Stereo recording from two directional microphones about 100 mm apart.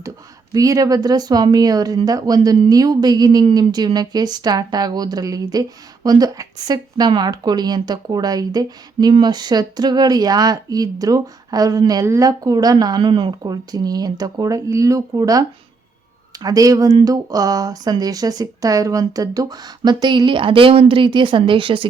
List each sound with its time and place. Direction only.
0.5 s speech: 35° right (ahead or behind); by 21.8 s 60° right (ahead or behind)